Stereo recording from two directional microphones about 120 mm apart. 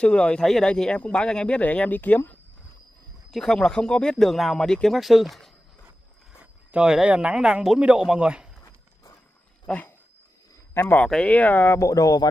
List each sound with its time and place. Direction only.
0.0 s speech: 10° left (ahead or behind)
3.3 s speech: 5° left (ahead or behind)
9.7 s speech: 15° left (ahead or behind)
11.9 s speech: 30° left (ahead or behind)